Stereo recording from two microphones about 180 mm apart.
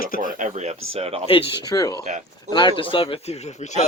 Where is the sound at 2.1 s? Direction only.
40° right (ahead or behind).